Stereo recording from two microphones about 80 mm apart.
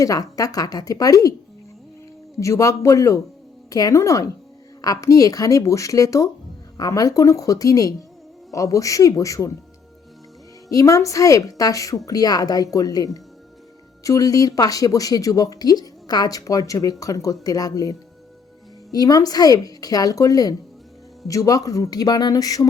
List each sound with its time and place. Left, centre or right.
0.0 s speech: left
2.4 s a man's voice: left
10.7 s speech: left